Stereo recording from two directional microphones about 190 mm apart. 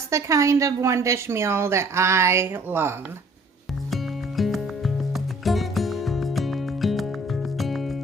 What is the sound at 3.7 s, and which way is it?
Music, centre (ahead or behind).